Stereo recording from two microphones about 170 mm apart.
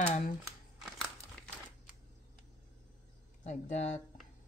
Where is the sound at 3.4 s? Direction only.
45° left (ahead or behind).